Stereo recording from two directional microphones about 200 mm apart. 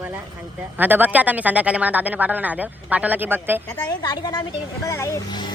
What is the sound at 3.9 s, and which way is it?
A child's voice, 20° left (ahead or behind).